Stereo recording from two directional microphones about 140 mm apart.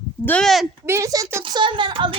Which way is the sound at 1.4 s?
35° right (ahead or behind).